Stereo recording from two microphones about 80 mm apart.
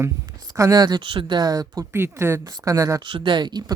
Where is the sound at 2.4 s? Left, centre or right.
Right.